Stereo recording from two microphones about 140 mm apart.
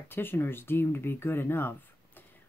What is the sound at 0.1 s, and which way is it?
Speech, 15° left (ahead or behind).